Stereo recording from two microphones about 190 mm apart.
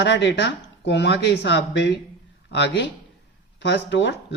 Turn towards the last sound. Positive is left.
turn(degrees=65)  # may be behind; listen again after turning